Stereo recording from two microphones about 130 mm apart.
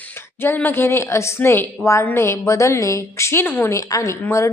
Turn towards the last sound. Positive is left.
turn(degrees=20)  # may be behind; listen again after turning